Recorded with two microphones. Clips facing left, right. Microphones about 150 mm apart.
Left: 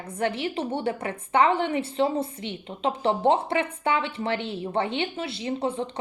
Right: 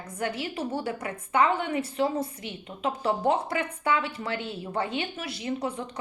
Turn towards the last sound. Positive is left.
turn(degrees=30)  # may be behind; listen again after turning